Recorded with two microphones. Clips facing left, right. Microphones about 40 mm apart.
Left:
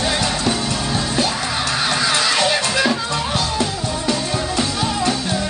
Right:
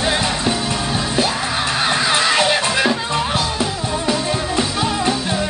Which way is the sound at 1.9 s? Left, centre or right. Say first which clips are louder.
Right 2 dB; right.